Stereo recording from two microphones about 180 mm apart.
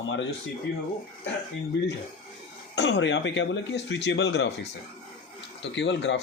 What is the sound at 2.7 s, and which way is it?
Speech, 75° left (ahead or behind).